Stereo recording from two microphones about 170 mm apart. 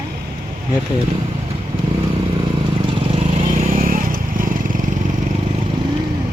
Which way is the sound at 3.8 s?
55° right (ahead or behind).